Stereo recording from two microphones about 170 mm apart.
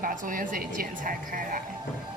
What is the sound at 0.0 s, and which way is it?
A woman's voice, 50° right (ahead or behind).